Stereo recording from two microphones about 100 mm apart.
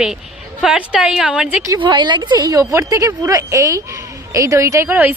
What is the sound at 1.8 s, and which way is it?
Speech, 50° right (ahead or behind).